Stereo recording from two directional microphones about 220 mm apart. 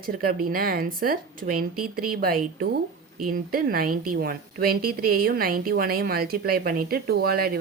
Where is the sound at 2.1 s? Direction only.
40° right (ahead or behind).